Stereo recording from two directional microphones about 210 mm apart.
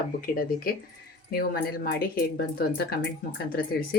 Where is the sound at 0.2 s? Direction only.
45° left (ahead or behind).